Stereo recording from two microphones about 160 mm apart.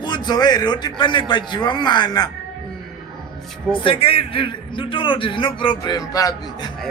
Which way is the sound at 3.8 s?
35° left (ahead or behind).